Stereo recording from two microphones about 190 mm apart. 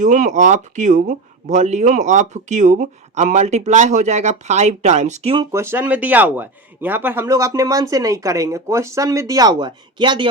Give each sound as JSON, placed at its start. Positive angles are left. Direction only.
{"t": 0.0, "sound": "speech", "side_deg": -40}
{"t": 5.5, "sound": "speech", "side_deg": -15}